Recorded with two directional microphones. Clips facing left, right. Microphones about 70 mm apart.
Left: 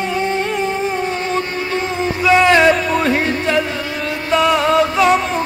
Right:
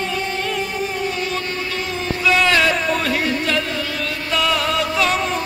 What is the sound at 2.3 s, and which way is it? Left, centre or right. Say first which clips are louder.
Music: left 6 dB; left.